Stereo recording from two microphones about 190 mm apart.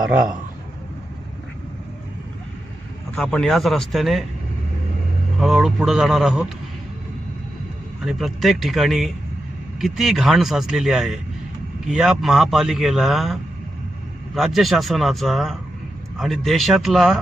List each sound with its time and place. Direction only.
3.2 s a man's voice: centre (ahead or behind)
5.4 s a man's voice: centre (ahead or behind)
8.0 s a man's voice: centre (ahead or behind)